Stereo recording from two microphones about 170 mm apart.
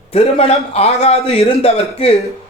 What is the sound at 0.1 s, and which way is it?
Speech, 35° left (ahead or behind).